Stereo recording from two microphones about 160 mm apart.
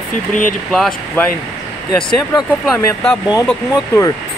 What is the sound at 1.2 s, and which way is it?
Speech, 10° left (ahead or behind).